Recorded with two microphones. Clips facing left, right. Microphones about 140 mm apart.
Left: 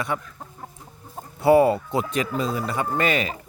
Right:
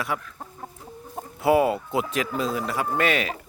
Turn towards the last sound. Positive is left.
turn(degrees=0)  # may be behind; listen again after turning